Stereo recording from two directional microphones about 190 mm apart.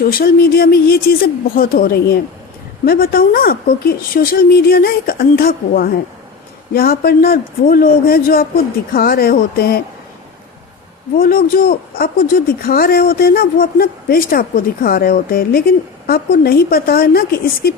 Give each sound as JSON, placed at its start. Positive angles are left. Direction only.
{"t": 0.0, "sound": "speech", "side_deg": 50}
{"t": 11.2, "sound": "speech", "side_deg": 50}